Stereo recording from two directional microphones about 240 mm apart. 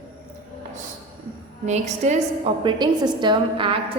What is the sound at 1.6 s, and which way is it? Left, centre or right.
Speech, right.